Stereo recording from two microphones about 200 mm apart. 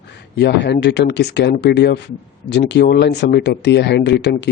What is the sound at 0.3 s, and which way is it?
Speech, 55° left (ahead or behind).